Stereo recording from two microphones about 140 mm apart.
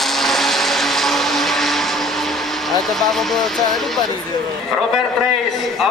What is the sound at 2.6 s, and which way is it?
A man's voice, centre (ahead or behind).